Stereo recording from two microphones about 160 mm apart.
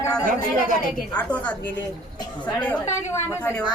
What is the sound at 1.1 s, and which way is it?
Speech, 10° left (ahead or behind).